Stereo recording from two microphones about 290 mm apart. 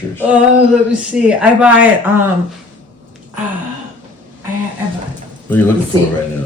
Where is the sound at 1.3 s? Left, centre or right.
Centre.